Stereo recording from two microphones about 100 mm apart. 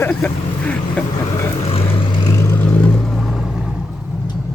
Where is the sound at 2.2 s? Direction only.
30° left (ahead or behind).